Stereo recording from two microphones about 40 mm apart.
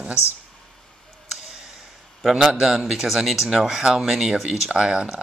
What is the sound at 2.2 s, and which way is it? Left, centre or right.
Speech, centre.